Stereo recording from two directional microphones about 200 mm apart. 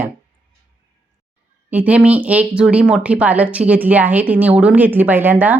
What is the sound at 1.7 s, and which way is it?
A woman's voice, 5° right (ahead or behind).